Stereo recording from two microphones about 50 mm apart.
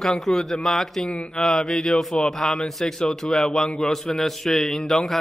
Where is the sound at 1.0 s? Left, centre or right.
Left.